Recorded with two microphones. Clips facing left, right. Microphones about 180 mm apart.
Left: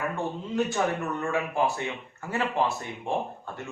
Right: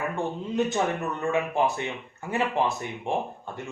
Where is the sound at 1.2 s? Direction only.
20° right (ahead or behind).